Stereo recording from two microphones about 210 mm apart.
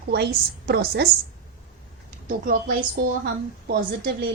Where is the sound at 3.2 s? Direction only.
45° right (ahead or behind).